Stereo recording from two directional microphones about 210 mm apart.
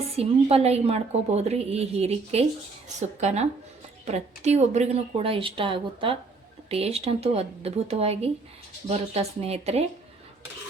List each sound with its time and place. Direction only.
0.1 s a woman's voice: 30° right (ahead or behind)